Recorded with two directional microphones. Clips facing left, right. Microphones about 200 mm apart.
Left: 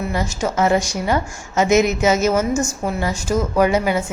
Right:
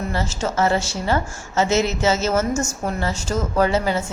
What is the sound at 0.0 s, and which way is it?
A woman's voice, 15° left (ahead or behind).